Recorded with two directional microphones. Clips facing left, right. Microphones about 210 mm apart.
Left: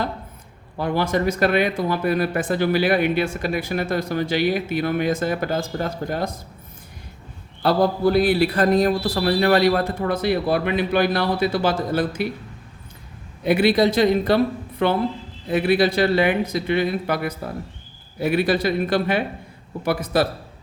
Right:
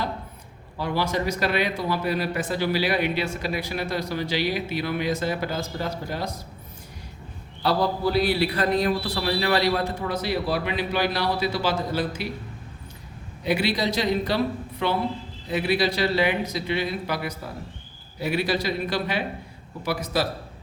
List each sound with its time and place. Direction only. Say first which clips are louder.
0.8 s speech: left 4 dB; 50° left (ahead or behind)
7.6 s speech: left 5 dB; 50° left (ahead or behind)
13.4 s speech: left 7 dB; 55° left (ahead or behind)